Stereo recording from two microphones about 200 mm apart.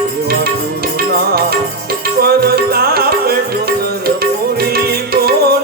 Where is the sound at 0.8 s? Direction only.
50° right (ahead or behind).